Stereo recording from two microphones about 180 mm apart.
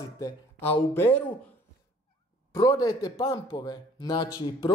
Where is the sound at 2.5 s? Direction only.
20° left (ahead or behind).